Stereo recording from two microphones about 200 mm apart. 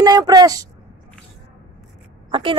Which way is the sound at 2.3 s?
25° right (ahead or behind).